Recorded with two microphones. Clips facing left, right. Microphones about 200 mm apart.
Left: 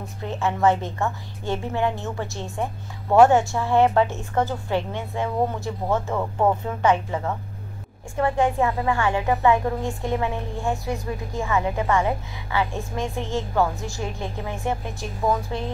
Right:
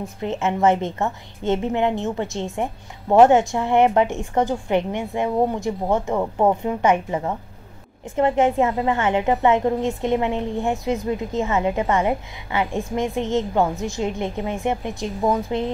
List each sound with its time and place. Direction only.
0.2 s a woman's voice: 20° right (ahead or behind)